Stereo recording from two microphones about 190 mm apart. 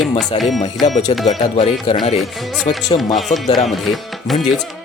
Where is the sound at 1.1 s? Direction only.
30° left (ahead or behind).